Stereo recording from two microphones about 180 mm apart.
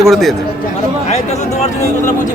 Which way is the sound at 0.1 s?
Centre (ahead or behind).